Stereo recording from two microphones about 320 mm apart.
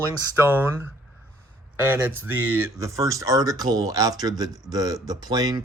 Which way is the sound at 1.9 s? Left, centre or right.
Centre.